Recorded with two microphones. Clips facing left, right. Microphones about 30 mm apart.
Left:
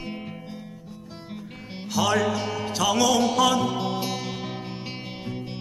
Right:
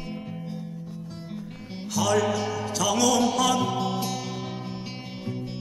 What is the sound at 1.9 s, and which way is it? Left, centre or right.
Music, left.